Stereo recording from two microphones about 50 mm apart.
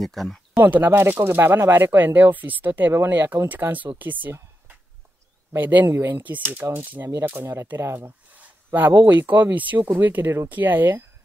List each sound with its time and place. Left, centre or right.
0.0 s speech: centre
0.7 s speech: right
2.1 s speech: right
5.9 s speech: right